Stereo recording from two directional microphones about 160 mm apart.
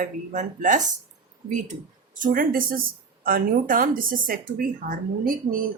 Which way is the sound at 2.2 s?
60° right (ahead or behind).